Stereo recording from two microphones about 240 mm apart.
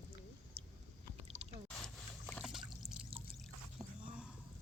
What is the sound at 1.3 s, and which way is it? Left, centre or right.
Squish, right.